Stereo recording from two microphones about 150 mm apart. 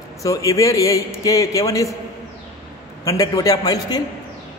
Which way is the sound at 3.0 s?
25° left (ahead or behind).